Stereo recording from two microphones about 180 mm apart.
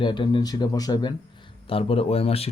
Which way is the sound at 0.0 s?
25° left (ahead or behind).